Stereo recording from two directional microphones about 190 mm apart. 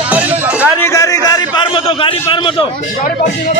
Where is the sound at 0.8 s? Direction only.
15° left (ahead or behind).